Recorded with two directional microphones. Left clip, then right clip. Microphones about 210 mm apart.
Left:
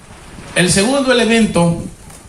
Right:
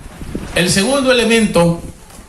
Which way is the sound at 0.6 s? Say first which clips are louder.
Left 1 dB; 55° right (ahead or behind).